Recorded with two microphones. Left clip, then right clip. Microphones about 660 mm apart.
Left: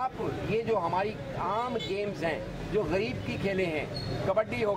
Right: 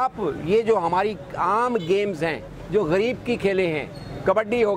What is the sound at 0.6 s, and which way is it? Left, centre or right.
Speech, right.